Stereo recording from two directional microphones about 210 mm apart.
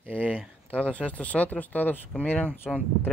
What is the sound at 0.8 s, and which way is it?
Speech, 5° left (ahead or behind).